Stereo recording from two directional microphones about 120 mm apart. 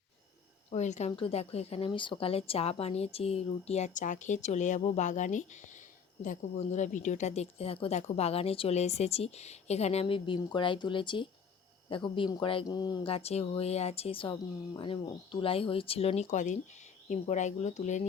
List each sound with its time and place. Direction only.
0.7 s speech: 75° left (ahead or behind)
1.1 s a woman's voice: 50° left (ahead or behind)
12.6 s speech: 35° left (ahead or behind)
13.1 s speech: 55° left (ahead or behind); by 18.0 s 85° left